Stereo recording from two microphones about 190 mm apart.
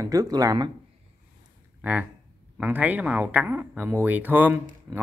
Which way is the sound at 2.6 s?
10° right (ahead or behind).